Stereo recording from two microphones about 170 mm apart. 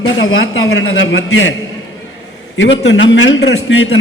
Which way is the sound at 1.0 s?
90° left.